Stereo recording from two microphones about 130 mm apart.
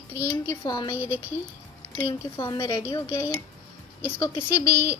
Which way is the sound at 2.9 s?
20° left (ahead or behind).